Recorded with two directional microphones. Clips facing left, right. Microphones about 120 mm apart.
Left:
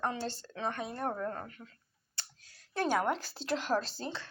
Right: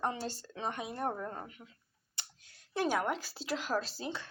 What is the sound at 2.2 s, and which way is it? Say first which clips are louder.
Clicking: even; 15° right (ahead or behind).